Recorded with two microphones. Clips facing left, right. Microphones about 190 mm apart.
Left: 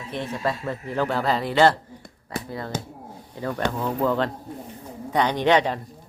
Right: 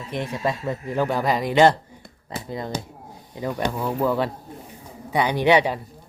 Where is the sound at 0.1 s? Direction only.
15° right (ahead or behind).